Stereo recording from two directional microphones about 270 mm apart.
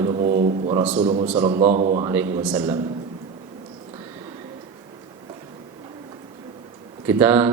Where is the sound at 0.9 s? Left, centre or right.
Right.